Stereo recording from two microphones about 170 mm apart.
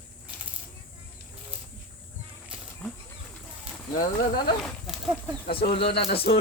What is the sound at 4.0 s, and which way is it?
Speech, 55° left (ahead or behind).